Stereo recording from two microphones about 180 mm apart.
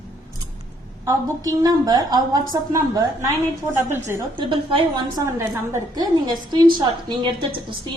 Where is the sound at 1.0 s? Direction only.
20° right (ahead or behind).